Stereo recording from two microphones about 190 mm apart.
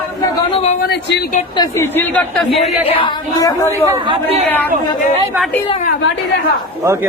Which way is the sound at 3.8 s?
25° right (ahead or behind).